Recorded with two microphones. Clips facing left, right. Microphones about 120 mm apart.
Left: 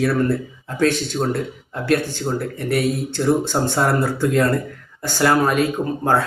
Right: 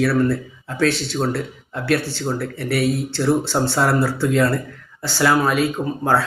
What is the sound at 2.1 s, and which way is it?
Speech, 45° left (ahead or behind).